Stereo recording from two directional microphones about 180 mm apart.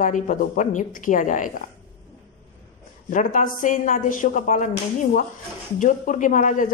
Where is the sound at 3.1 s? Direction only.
45° left (ahead or behind).